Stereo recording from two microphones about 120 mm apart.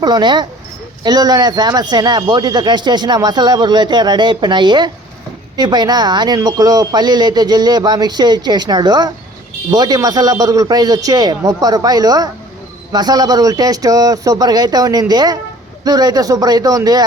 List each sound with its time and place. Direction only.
0.0 s speech: 35° right (ahead or behind)